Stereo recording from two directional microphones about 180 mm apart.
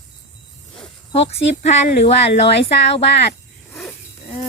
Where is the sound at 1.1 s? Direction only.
35° left (ahead or behind).